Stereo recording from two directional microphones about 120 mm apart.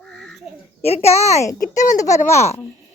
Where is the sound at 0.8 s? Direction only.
60° left (ahead or behind).